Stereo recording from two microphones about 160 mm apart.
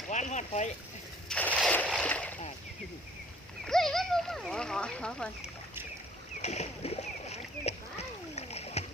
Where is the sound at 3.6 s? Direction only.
Centre (ahead or behind).